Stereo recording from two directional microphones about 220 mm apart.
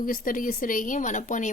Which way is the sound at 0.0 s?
40° left (ahead or behind).